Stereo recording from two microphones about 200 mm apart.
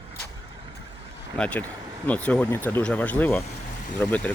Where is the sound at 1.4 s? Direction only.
5° left (ahead or behind).